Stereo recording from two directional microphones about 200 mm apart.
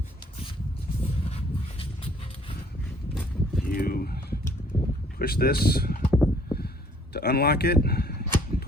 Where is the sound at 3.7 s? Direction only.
50° left (ahead or behind).